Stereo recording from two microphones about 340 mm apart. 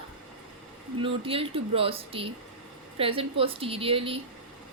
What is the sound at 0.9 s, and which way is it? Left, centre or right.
Speech, centre.